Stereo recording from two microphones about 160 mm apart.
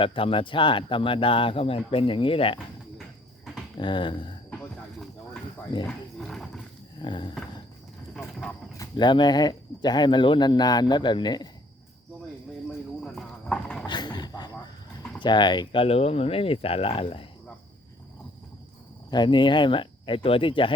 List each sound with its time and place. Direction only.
0.0 s speech: 35° left (ahead or behind)
3.8 s speech: 30° left (ahead or behind)
4.5 s snake: 5° left (ahead or behind)
6.1 s a sound: 5° left (ahead or behind)
7.0 s speech: 30° left (ahead or behind)
8.1 s wild animals: 5° left (ahead or behind)
8.8 s speech: 30° left (ahead or behind)
13.0 s a sound: 5° left (ahead or behind)
13.8 s a sound: 25° left (ahead or behind)
15.2 s speech: 30° left (ahead or behind)
19.1 s speech: 30° left (ahead or behind)